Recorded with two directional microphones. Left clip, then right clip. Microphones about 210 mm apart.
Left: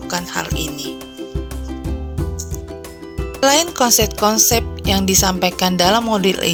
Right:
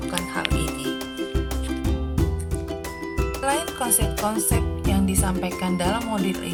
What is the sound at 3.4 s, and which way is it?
Speech, 45° left (ahead or behind).